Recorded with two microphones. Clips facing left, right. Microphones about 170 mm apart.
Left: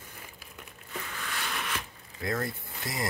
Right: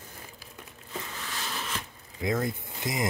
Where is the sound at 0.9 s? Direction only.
30° right (ahead or behind).